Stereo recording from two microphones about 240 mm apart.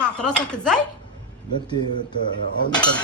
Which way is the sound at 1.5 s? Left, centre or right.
Centre.